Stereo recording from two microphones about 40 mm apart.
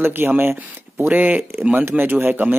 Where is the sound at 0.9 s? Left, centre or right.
Right.